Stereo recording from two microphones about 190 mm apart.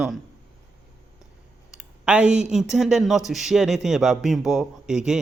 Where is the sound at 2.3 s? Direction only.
5° right (ahead or behind).